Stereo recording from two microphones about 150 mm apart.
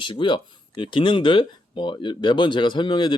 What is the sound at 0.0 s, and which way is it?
Speech, 35° left (ahead or behind).